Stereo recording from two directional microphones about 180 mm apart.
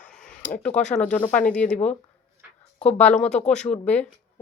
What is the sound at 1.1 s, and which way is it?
Speech, 10° left (ahead or behind).